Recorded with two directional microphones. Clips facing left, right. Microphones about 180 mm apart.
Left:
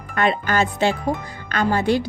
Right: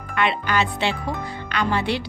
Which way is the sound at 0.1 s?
45° left (ahead or behind).